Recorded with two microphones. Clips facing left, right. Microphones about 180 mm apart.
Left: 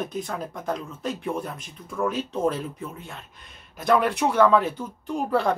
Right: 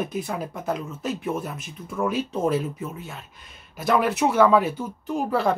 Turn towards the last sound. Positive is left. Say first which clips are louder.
# right 1 dB
turn(degrees=0)  # may be behind; listen again after turning